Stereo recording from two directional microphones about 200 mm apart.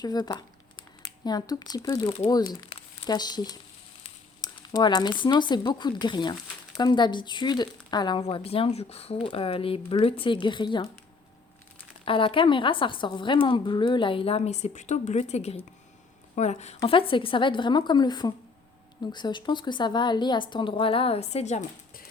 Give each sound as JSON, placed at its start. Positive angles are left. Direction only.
{"t": 0.0, "sound": "speech", "side_deg": 20}
{"t": 12.0, "sound": "speech", "side_deg": 25}